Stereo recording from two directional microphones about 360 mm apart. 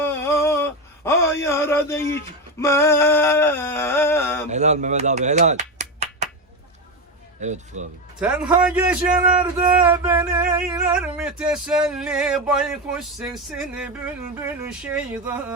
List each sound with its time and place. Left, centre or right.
0.0 s a sound: centre
4.4 s speech: centre
7.4 s speech: centre
8.2 s music: centre